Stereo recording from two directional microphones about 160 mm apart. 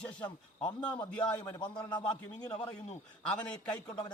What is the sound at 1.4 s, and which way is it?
Speech, 25° left (ahead or behind).